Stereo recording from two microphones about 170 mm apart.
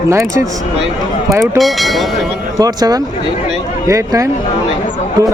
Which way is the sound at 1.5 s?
Centre (ahead or behind).